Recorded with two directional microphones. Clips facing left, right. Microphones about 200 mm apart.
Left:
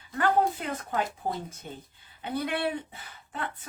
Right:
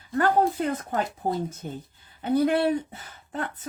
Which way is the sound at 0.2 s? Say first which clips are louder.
Right 3 dB; 45° right (ahead or behind).